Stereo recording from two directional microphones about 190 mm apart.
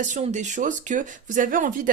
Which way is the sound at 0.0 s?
40° right (ahead or behind).